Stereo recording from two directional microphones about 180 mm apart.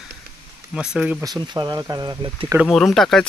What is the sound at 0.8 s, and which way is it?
Speech, 5° right (ahead or behind).